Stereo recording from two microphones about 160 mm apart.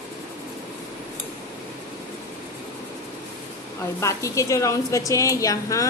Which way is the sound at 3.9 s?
20° left (ahead or behind).